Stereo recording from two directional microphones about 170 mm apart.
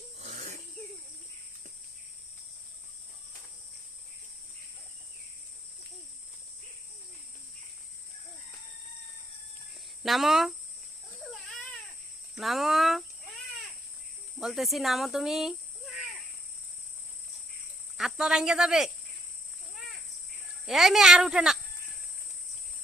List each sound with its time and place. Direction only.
0.2 s a sound: 45° right (ahead or behind)
10.0 s speech: centre (ahead or behind)
12.4 s speech: centre (ahead or behind)
14.3 s speech: centre (ahead or behind)
17.9 s speech: 5° right (ahead or behind)
20.7 s speech: centre (ahead or behind)